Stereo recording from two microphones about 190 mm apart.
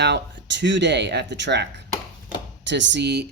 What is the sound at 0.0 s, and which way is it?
Speech, 65° right (ahead or behind).